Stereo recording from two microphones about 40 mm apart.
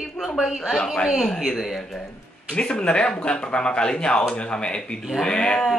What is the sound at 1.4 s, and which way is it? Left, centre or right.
Speech, centre.